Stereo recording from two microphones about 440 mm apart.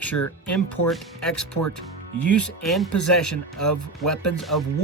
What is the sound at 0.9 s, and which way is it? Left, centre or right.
Speech, centre.